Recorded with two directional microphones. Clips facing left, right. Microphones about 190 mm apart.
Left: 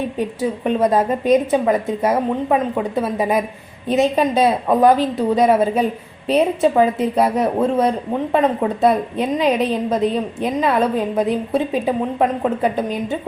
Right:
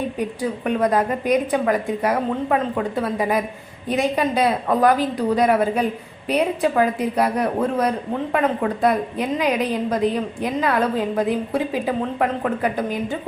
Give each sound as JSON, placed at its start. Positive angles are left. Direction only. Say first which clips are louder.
{"t": 0.2, "sound": "a woman's voice", "louder": "left 3 dB", "side_deg": 25}